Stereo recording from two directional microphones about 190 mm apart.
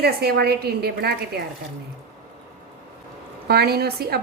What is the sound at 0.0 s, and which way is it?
A woman's voice, 55° right (ahead or behind).